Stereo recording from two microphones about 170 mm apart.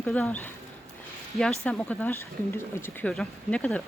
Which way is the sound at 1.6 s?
5° left (ahead or behind).